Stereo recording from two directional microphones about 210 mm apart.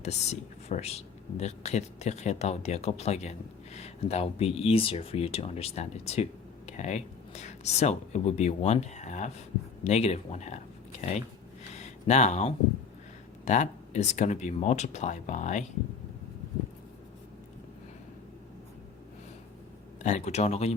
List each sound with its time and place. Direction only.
0.0 s speech: 30° left (ahead or behind)
11.7 s a sound: 35° left (ahead or behind)
13.4 s speech: 35° left (ahead or behind)
20.0 s speech: 35° left (ahead or behind)